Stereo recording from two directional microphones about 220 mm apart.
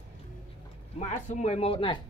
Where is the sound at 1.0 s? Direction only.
30° left (ahead or behind).